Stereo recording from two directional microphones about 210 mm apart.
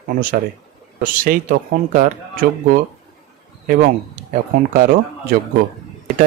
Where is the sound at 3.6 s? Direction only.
40° right (ahead or behind).